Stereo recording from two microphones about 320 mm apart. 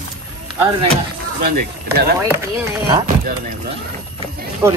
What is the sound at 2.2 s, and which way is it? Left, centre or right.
Speech, centre.